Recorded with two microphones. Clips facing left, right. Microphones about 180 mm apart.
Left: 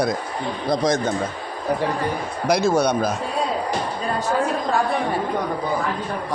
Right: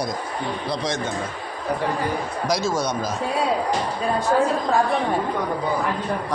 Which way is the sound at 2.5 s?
60° left (ahead or behind).